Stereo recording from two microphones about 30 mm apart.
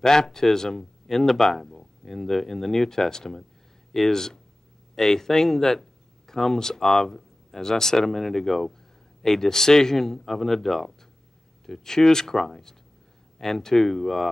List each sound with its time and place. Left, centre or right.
0.0 s speech: centre